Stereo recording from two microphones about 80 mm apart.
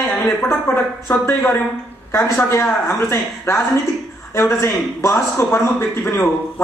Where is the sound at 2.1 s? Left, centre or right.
Left.